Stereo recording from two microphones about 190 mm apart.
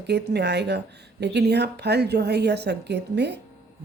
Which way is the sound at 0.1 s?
60° right (ahead or behind).